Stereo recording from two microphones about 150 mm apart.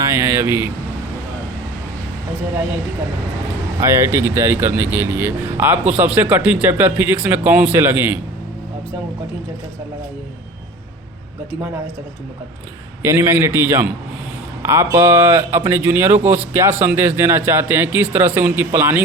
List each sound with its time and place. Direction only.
0.0 s speech: 15° right (ahead or behind)
3.8 s speech: 15° right (ahead or behind)
13.0 s speech: 15° right (ahead or behind)